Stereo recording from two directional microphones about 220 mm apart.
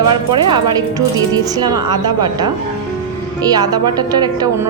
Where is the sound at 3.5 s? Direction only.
15° right (ahead or behind).